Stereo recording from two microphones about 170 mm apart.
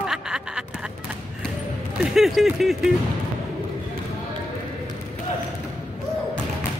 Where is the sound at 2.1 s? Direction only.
Centre (ahead or behind).